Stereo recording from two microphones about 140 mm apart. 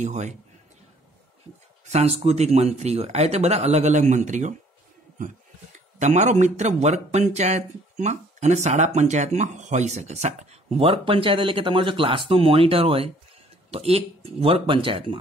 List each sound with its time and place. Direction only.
0.0 s a man's voice: 60° right (ahead or behind)
1.9 s a man's voice: 50° right (ahead or behind)
5.9 s a man's voice: 55° right (ahead or behind); by 15.1 s 40° right (ahead or behind)